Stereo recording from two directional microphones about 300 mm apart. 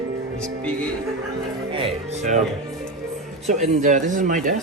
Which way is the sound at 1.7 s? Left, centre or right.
Centre.